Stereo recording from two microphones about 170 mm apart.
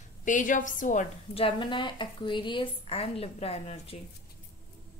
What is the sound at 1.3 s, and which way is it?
A woman's voice, 30° left (ahead or behind).